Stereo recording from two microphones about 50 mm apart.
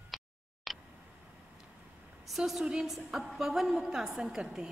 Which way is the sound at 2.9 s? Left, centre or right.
Centre.